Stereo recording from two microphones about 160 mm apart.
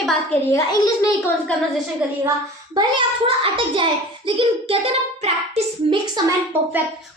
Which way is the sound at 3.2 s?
35° right (ahead or behind).